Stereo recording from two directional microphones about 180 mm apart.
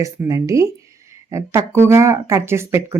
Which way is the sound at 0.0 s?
20° right (ahead or behind).